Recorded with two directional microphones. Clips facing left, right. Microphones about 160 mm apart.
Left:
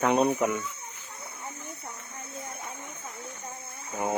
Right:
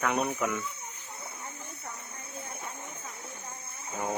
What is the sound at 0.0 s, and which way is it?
Speech, 25° left (ahead or behind).